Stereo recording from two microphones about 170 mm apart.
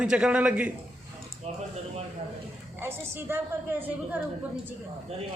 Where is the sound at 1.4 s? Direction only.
40° right (ahead or behind).